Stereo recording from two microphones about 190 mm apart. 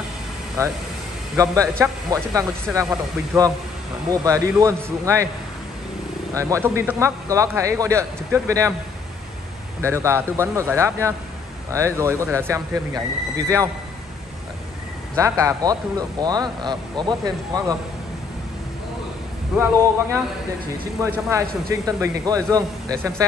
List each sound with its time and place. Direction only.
0.6 s a man's voice: 15° right (ahead or behind)
3.3 s speech: centre (ahead or behind)
4.1 s a man's voice: 20° right (ahead or behind)
6.3 s a man's voice: 15° right (ahead or behind)
9.8 s a man's voice: 15° right (ahead or behind)
15.1 s speech: 15° right (ahead or behind)
19.5 s a man's voice: 5° right (ahead or behind)
21.3 s a man's voice: 15° right (ahead or behind)